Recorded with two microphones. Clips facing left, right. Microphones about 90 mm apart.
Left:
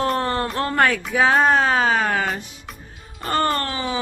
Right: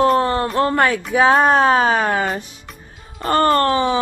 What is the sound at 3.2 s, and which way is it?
Speech, 45° right (ahead or behind).